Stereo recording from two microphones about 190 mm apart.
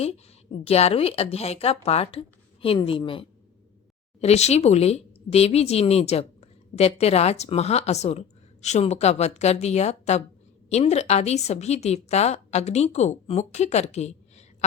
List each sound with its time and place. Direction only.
0.6 s speech: 35° left (ahead or behind)